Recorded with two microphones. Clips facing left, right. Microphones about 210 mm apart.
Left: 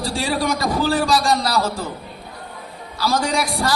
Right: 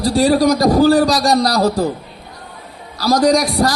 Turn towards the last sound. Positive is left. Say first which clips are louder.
# right 8 dB
turn(degrees=-40)  # may be behind; listen again after turning